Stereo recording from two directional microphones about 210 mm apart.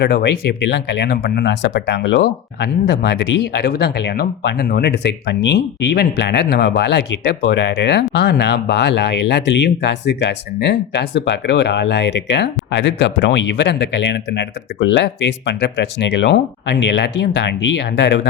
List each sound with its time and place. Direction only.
0.0 s speech: 50° left (ahead or behind)